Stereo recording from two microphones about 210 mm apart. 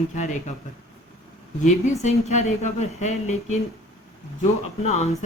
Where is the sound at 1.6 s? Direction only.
35° left (ahead or behind).